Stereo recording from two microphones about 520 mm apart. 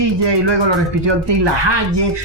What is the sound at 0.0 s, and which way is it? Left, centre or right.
Speech, right.